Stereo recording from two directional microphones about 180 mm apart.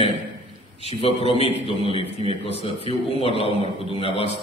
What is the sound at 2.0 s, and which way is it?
Speech, 35° right (ahead or behind).